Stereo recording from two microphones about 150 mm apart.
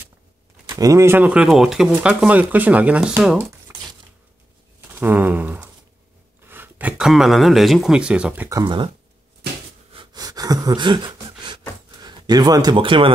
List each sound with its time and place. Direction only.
0.7 s speech: 25° right (ahead or behind)
4.9 s a sound: 15° right (ahead or behind)
6.4 s speech: 15° right (ahead or behind)
8.5 s speech: 30° right (ahead or behind)
9.9 s a sound: 25° right (ahead or behind)
12.0 s a man's voice: 25° right (ahead or behind)